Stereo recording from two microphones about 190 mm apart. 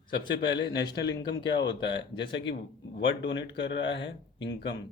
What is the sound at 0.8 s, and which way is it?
Speech, 65° left (ahead or behind).